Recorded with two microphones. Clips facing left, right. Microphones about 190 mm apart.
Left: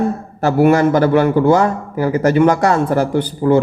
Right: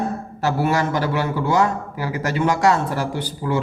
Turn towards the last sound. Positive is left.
turn(degrees=50)  # may be behind; listen again after turning